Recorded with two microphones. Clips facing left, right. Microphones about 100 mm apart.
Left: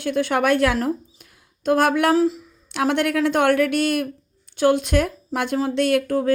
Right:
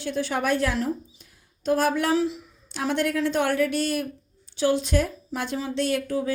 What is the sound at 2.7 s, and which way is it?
A woman's voice, 65° left (ahead or behind).